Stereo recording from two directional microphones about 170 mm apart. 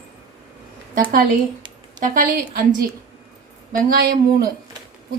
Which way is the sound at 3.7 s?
55° right (ahead or behind).